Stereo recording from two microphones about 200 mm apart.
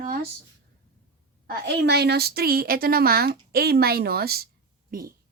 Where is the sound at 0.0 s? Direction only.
45° right (ahead or behind).